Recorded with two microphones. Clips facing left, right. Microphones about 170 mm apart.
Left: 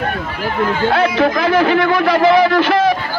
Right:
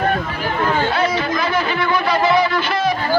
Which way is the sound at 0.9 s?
80° left.